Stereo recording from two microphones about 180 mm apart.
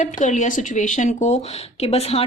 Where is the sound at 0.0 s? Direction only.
45° left (ahead or behind).